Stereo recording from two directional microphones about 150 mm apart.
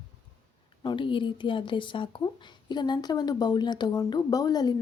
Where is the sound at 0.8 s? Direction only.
35° left (ahead or behind).